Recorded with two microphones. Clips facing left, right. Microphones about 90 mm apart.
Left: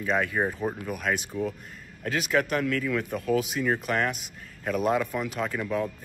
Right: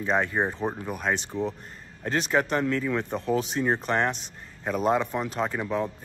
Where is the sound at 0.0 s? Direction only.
25° right (ahead or behind).